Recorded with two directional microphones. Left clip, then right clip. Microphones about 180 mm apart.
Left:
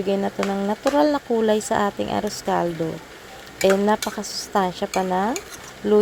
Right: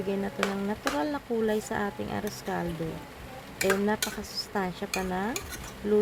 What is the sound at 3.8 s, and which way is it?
Speech, 25° left (ahead or behind).